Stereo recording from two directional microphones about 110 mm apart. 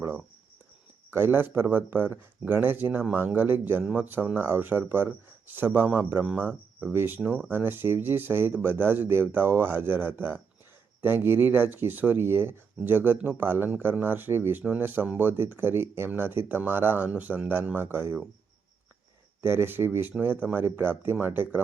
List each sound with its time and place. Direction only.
1.1 s speech: 20° right (ahead or behind)
19.4 s speech: 20° right (ahead or behind)